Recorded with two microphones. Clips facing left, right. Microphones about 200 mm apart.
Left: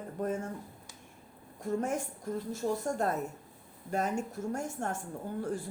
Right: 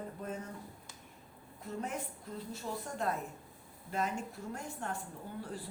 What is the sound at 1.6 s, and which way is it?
A woman's voice, 45° left (ahead or behind).